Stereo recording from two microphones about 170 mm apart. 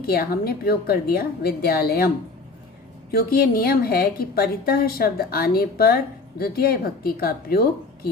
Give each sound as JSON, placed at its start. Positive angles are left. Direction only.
{"t": 0.0, "sound": "a woman's voice", "side_deg": 65}
{"t": 3.1, "sound": "a woman's voice", "side_deg": 60}